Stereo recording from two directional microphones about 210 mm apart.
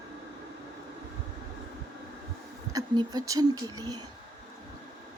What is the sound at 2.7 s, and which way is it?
Speech, 20° right (ahead or behind).